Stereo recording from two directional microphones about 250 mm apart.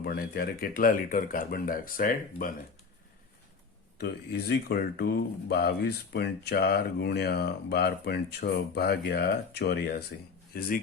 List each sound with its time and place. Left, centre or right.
0.0 s speech: left
3.9 s speech: left